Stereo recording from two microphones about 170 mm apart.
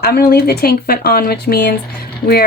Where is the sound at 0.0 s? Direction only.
65° left (ahead or behind).